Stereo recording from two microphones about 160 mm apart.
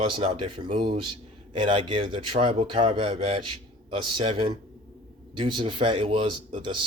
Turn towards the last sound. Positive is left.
turn(degrees=-30)  # may be behind; listen again after turning